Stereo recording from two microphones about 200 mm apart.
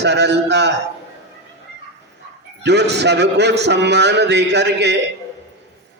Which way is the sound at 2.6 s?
55° right (ahead or behind).